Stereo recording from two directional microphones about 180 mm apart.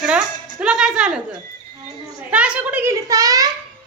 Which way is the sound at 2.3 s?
5° right (ahead or behind).